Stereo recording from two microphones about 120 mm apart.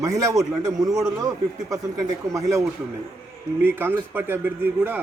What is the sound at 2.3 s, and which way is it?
A man's voice, 25° right (ahead or behind).